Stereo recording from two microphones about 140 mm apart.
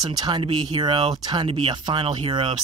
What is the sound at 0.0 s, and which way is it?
Speech, 30° right (ahead or behind).